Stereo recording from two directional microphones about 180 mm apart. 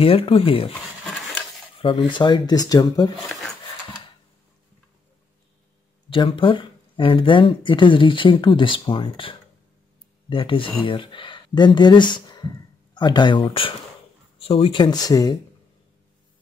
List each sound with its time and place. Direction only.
0.0 s speech: 30° left (ahead or behind)
1.8 s speech: 30° left (ahead or behind)
6.0 s speech: 30° left (ahead or behind)